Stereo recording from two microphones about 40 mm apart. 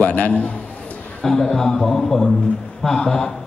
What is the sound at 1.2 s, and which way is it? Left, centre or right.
A man's voice, centre.